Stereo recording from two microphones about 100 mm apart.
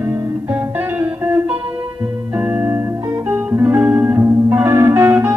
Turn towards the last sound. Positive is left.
turn(degrees=-25)  # may be behind; listen again after turning